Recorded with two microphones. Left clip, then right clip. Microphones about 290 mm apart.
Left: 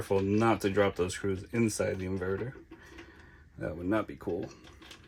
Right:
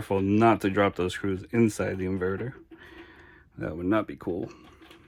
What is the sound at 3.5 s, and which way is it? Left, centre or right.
Speech, right.